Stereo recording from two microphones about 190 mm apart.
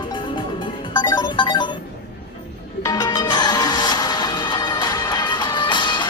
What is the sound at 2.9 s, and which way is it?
Music, 20° left (ahead or behind).